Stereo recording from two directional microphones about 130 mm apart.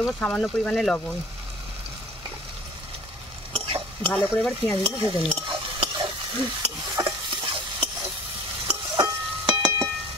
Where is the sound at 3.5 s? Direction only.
45° right (ahead or behind).